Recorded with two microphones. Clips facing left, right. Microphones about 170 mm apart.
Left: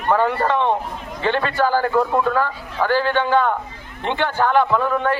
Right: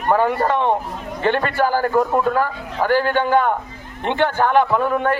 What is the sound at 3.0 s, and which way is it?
A man's voice, 45° right (ahead or behind).